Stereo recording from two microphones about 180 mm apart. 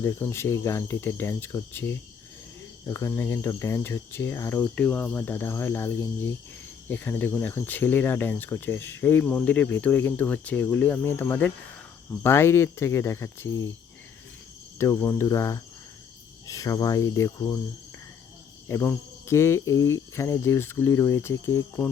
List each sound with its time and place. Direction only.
0.0 s speech: 15° left (ahead or behind)
14.8 s speech: 15° left (ahead or behind)
18.7 s speech: 15° left (ahead or behind)